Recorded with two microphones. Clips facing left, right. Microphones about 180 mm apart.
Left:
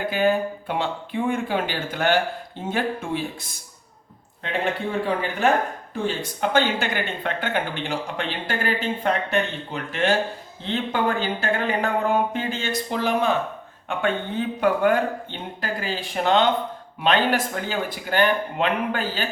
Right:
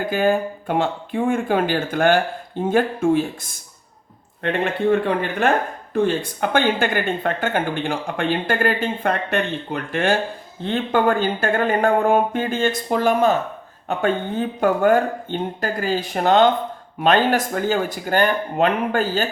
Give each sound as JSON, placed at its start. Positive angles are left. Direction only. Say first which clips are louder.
{"t": 0.1, "sound": "speech", "louder": "right 2 dB", "side_deg": -45}
{"t": 4.4, "sound": "speech", "louder": "right 6 dB", "side_deg": -60}